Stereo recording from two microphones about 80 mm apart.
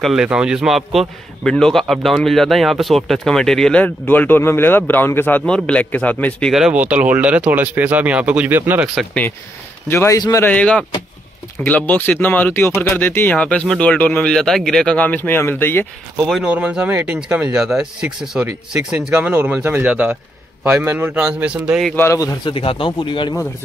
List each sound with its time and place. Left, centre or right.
0.0 s speech: centre
3.8 s a man's voice: left
5.5 s a man's voice: centre
6.7 s speech: centre
9.8 s speech: left
10.4 s a man's voice: centre
14.3 s a man's voice: centre
15.0 s a man's voice: left
16.4 s speech: centre
19.8 s speech: centre
20.8 s speech: right
22.4 s speech: left